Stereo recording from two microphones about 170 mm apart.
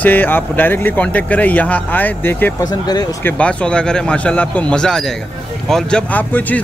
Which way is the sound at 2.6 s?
20° left (ahead or behind).